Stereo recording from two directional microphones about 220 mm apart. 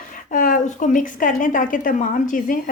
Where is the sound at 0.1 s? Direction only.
35° left (ahead or behind).